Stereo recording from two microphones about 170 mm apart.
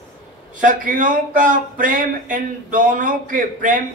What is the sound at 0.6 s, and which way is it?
Speech, 50° right (ahead or behind).